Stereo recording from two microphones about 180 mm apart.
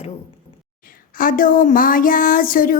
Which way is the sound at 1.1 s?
50° left (ahead or behind).